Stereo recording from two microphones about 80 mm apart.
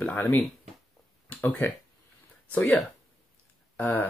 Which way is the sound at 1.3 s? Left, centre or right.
Centre.